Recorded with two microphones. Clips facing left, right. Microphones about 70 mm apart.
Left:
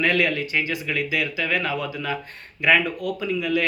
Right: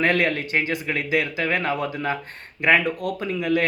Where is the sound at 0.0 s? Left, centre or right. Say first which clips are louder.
Right 1 dB; right.